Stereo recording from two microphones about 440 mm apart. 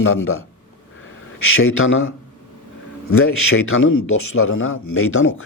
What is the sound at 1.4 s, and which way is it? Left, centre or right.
Speech, left.